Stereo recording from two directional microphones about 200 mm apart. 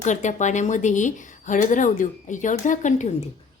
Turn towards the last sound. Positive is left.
turn(degrees=40)  # may be behind; listen again after turning